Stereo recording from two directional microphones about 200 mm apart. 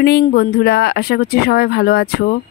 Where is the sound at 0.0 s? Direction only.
50° left (ahead or behind).